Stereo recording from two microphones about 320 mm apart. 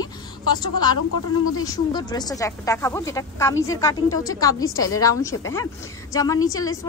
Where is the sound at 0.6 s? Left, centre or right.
Centre.